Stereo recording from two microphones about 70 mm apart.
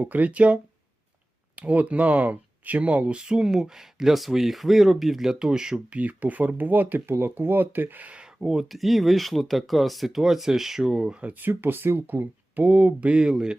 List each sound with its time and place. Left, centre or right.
0.0 s speech: right
6.0 s speech: right
8.4 s speech: centre